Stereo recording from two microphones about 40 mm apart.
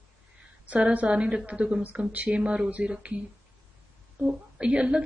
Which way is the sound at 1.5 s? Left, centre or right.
Right.